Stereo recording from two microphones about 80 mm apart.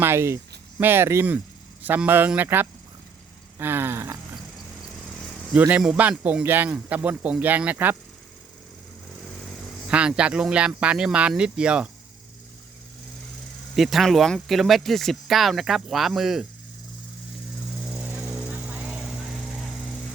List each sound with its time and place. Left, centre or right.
0.0 s speech: right
5.5 s speech: centre
9.8 s speech: centre
13.7 s speech: centre
18.2 s a sound: centre
18.5 s vehicle: centre